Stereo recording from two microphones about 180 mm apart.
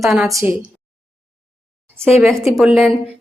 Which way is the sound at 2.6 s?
Centre (ahead or behind).